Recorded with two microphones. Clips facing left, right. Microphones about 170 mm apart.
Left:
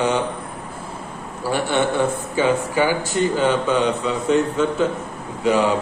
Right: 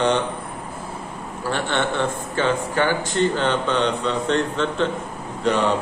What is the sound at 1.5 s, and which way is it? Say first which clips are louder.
A man's voice: left 3 dB; 10° left (ahead or behind).